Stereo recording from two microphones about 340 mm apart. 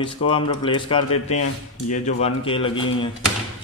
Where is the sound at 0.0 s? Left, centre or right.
Centre.